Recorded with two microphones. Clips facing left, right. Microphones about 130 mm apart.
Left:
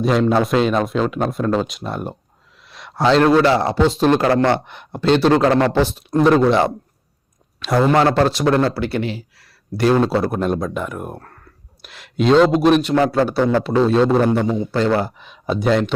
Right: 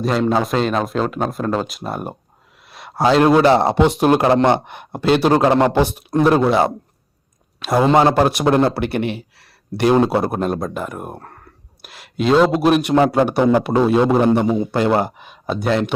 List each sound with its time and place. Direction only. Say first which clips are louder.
0.0 s a man's voice: left 2 dB; centre (ahead or behind); by 4.6 s 20° right (ahead or behind)
4.6 s speech: right 3 dB; 55° right (ahead or behind)
4.9 s a man's voice: even; 10° right (ahead or behind)
6.1 s a man's voice: left 2 dB; 5° right (ahead or behind)
7.9 s a man's voice: right 2 dB; 20° right (ahead or behind)
8.8 s speech: right 1 dB; 60° right (ahead or behind)
9.7 s a man's voice: right 1 dB; 20° right (ahead or behind)
10.4 s speech: left 1 dB; centre (ahead or behind)
13.3 s a man's voice: right 2 dB; 15° right (ahead or behind)
15.3 s speech: left 5 dB; centre (ahead or behind)